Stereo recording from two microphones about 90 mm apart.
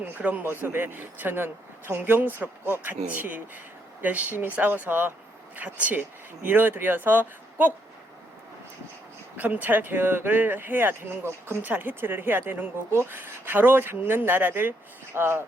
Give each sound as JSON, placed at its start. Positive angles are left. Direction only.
{"t": 0.0, "sound": "speech", "side_deg": -15}
{"t": 9.4, "sound": "speech", "side_deg": -20}